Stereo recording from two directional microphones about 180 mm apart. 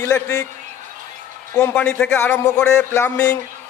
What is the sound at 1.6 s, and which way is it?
A man's voice, 10° left (ahead or behind).